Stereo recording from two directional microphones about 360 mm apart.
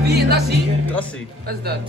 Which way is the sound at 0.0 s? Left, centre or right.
Right.